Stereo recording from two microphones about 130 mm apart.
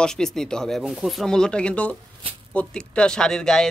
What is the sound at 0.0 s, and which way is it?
Speech, 5° left (ahead or behind).